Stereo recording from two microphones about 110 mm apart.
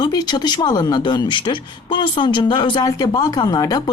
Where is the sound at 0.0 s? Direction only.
40° left (ahead or behind).